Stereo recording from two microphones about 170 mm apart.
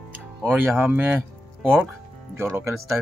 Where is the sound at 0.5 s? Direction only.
10° right (ahead or behind).